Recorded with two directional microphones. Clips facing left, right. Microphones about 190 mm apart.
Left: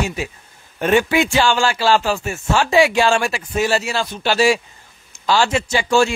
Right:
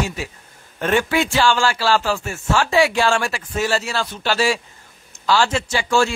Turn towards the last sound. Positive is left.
turn(degrees=15)  # may be behind; listen again after turning